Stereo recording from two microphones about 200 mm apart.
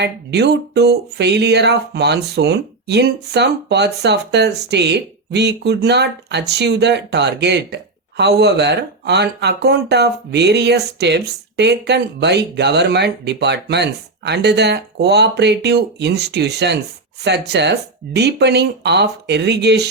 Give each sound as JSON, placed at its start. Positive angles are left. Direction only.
{"t": 0.0, "sound": "speech", "side_deg": -55}